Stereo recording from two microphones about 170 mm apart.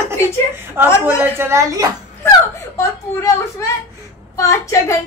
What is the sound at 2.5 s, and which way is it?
A woman's voice, 15° left (ahead or behind).